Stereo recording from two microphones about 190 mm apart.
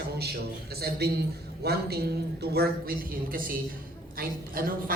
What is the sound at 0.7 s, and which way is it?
A woman's voice, 55° right (ahead or behind).